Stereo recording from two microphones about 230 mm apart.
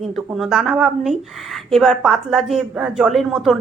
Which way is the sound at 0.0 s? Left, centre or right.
Centre.